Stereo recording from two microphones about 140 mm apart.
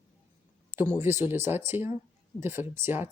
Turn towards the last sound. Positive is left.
turn(degrees=-15)  # may be behind; listen again after turning